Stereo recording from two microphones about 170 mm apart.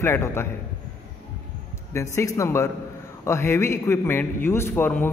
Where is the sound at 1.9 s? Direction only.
15° left (ahead or behind).